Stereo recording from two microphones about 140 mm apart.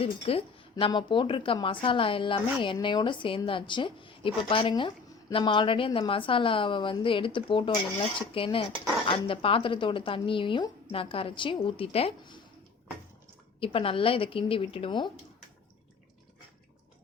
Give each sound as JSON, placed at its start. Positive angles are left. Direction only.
{"t": 0.0, "sound": "a woman's voice", "side_deg": 45}
{"t": 13.6, "sound": "a woman's voice", "side_deg": 40}